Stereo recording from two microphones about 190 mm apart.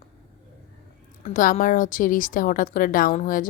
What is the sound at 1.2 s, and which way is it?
A woman's voice, 45° left (ahead or behind).